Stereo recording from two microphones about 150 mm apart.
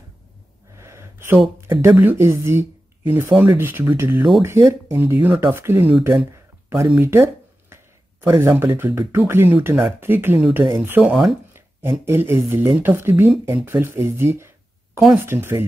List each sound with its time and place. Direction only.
0.7 s a sound: 20° right (ahead or behind)
1.8 s speech: 15° right (ahead or behind)
7.0 s speech: 15° right (ahead or behind)
7.7 s a sound: 15° right (ahead or behind)
8.4 s speech: 15° right (ahead or behind)
11.5 s speech: 15° right (ahead or behind)